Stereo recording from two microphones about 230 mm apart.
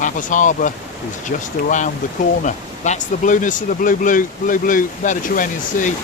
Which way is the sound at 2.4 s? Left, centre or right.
Left.